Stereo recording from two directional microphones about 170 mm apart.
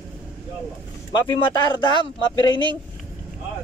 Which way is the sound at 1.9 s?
25° left (ahead or behind).